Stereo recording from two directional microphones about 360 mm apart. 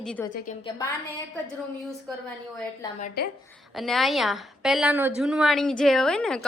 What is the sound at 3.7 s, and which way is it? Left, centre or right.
A woman's voice, centre.